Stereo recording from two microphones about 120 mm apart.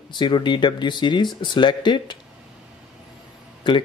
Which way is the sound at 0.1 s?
40° left (ahead or behind).